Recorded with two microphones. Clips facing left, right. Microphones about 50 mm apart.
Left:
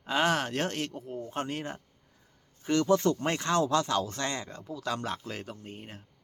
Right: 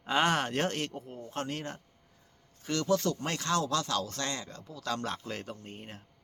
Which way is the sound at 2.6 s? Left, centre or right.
Left.